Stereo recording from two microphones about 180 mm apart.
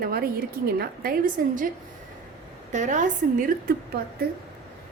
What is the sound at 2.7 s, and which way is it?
A woman's voice, 40° right (ahead or behind).